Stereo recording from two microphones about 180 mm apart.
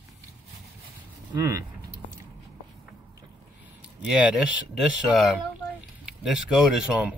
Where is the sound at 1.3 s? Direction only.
15° right (ahead or behind).